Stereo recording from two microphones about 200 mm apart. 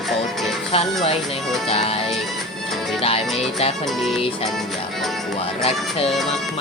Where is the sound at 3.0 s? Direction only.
30° left (ahead or behind).